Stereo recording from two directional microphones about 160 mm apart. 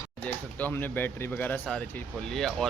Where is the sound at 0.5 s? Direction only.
10° left (ahead or behind).